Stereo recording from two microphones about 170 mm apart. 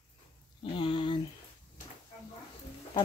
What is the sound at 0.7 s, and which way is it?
Speech, 30° left (ahead or behind).